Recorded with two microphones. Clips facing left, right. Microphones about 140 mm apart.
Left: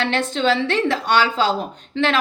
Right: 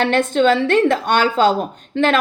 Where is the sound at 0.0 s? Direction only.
50° right (ahead or behind).